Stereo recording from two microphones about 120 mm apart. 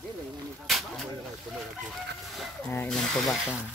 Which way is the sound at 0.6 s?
Centre (ahead or behind).